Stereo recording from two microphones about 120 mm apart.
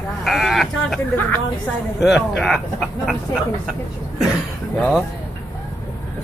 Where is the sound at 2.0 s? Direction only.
Centre (ahead or behind).